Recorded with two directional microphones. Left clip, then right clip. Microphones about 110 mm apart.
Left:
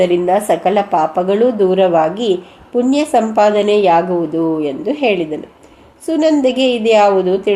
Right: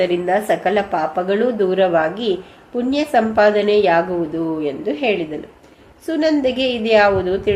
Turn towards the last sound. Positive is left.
turn(degrees=35)  # may be behind; listen again after turning